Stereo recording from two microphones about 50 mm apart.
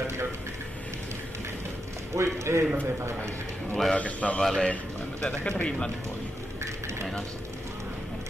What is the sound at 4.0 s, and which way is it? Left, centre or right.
Speech, left.